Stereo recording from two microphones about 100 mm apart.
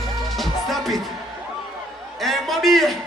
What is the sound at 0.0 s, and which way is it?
Music, centre (ahead or behind).